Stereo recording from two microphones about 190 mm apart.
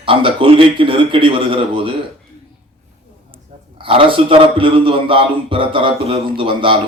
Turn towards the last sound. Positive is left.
turn(degrees=-25)  # may be behind; listen again after turning